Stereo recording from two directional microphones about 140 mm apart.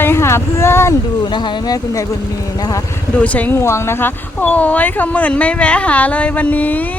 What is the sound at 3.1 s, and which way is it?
Speech, 10° left (ahead or behind).